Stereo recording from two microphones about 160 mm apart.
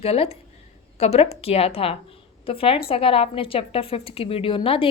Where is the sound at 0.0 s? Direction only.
40° left (ahead or behind).